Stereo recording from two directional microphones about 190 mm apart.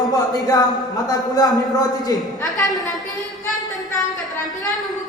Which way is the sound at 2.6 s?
20° left (ahead or behind).